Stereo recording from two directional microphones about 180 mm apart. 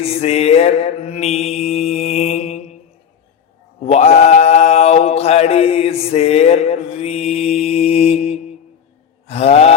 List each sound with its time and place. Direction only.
0.0 s mantra: 35° left (ahead or behind)
3.8 s mantra: 35° left (ahead or behind)